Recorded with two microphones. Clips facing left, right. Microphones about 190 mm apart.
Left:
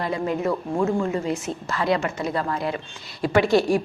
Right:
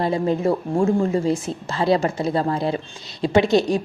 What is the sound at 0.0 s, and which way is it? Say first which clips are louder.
A woman's voice: right 4 dB; 30° right (ahead or behind).